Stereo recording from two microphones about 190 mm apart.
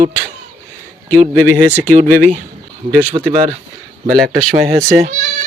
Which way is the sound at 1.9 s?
40° right (ahead or behind).